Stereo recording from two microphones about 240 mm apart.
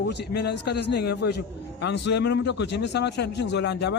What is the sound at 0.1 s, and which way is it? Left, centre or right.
A man's voice, left.